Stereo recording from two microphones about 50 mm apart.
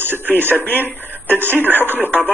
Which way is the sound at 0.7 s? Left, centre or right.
Left.